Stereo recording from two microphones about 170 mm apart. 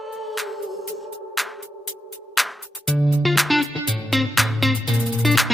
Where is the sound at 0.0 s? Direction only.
Centre (ahead or behind).